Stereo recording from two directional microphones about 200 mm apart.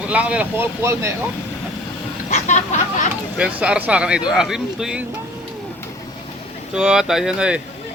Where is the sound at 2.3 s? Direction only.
35° left (ahead or behind).